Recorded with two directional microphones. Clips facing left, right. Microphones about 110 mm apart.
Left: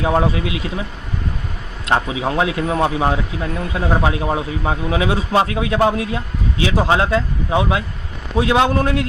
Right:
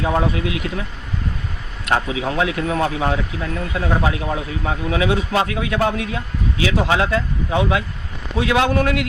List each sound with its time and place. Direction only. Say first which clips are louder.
0.0 s speech: left 2 dB; 20° left (ahead or behind)
1.8 s speech: left 2 dB; 25° left (ahead or behind)